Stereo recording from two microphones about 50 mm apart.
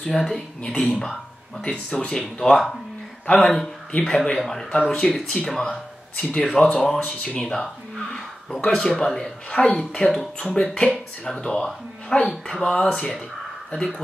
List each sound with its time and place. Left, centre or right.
0.0 s speech: centre
1.6 s speech: centre
2.4 s speech: centre
3.3 s speech: left
4.3 s speech: centre
10.0 s speech: left
10.4 s speech: centre